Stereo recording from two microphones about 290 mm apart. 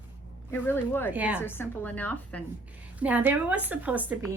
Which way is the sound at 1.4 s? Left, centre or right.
Centre.